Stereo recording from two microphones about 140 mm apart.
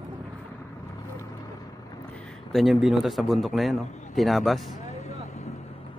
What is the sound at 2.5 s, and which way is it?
Speech, centre (ahead or behind).